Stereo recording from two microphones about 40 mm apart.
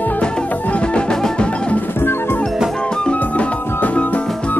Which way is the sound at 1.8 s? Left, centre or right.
Left.